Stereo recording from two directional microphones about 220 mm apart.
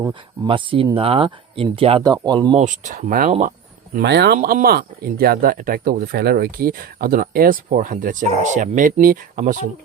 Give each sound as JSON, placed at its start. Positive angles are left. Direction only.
{"t": 0.0, "sound": "speech", "side_deg": -20}
{"t": 2.6, "sound": "speech", "side_deg": -35}
{"t": 3.9, "sound": "speech", "side_deg": -50}
{"t": 4.4, "sound": "speech", "side_deg": -35}